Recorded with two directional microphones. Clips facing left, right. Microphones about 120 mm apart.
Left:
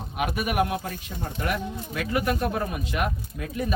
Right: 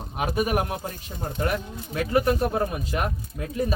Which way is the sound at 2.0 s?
30° right (ahead or behind).